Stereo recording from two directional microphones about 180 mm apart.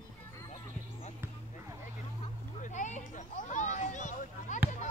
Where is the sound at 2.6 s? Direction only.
45° left (ahead or behind).